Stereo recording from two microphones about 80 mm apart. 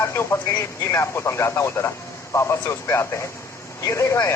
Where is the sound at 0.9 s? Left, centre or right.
Left.